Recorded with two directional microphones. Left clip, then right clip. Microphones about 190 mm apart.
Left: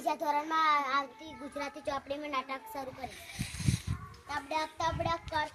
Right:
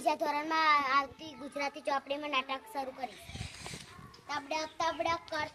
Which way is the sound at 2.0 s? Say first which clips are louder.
Right 2 dB; 25° left (ahead or behind).